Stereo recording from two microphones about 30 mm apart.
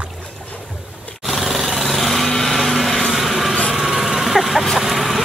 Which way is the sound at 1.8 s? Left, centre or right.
Centre.